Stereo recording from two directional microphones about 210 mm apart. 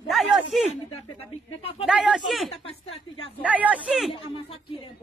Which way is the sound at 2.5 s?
25° left (ahead or behind).